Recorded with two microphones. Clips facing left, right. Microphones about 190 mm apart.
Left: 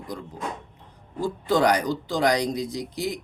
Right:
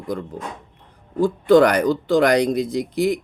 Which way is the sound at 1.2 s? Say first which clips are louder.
Right 9 dB; 55° right (ahead or behind).